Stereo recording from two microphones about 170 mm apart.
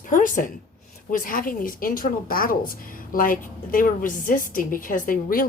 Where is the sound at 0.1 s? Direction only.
50° left (ahead or behind).